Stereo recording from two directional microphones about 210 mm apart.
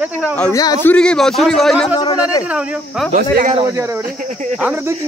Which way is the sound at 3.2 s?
45° right (ahead or behind).